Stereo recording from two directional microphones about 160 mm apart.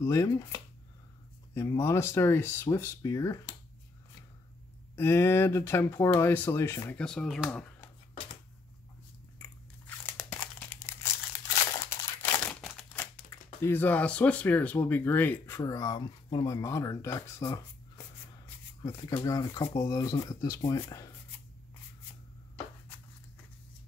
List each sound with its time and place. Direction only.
0.0 s speech: 20° left (ahead or behind)
4.9 s speech: 15° left (ahead or behind)
9.4 s crumpling: 15° left (ahead or behind)
12.6 s a sound: 5° left (ahead or behind)
13.3 s speech: 15° left (ahead or behind)